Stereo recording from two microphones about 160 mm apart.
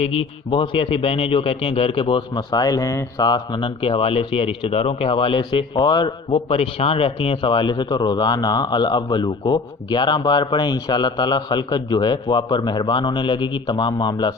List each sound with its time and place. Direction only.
0.1 s a man's voice: 30° left (ahead or behind)